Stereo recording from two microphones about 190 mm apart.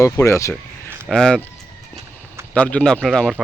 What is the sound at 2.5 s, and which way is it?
Speech, 5° left (ahead or behind).